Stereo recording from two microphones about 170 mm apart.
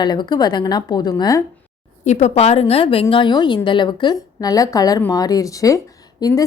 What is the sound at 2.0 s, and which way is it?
A woman's voice, 40° left (ahead or behind).